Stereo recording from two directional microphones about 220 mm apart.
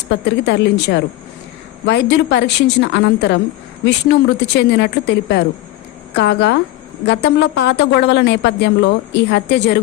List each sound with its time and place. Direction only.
0.4 s speech: 50° left (ahead or behind)